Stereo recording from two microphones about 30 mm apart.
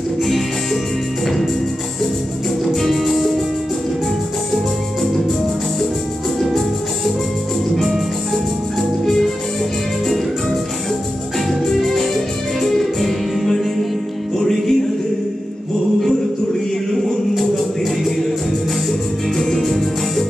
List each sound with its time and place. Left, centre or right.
2.6 s music: centre
9.0 s music: centre
11.6 s music: centre
19.3 s music: centre
19.6 s music: centre